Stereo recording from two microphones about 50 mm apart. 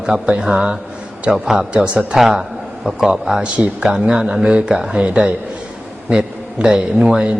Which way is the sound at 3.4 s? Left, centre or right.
Right.